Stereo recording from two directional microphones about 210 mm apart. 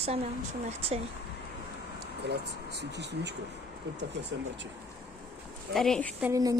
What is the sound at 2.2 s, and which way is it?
Speech, 55° right (ahead or behind).